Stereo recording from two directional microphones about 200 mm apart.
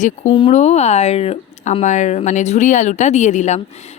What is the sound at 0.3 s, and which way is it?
Speech, 30° left (ahead or behind).